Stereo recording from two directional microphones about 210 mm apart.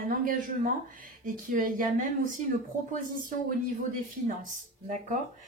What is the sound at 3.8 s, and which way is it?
Speech, 35° right (ahead or behind).